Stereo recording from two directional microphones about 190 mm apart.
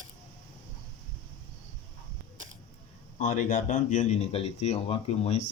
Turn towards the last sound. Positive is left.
turn(degrees=35)  # may be behind; listen again after turning